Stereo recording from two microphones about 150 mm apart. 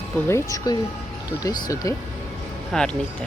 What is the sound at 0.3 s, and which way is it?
Speech, 20° left (ahead or behind).